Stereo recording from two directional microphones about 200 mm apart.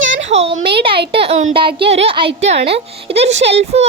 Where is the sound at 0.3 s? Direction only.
30° right (ahead or behind).